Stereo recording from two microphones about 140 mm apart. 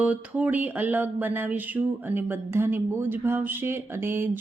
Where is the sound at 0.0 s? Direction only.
10° right (ahead or behind).